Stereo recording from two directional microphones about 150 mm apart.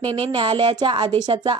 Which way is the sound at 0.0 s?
35° right (ahead or behind).